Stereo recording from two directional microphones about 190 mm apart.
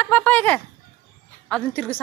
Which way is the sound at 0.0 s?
10° left (ahead or behind).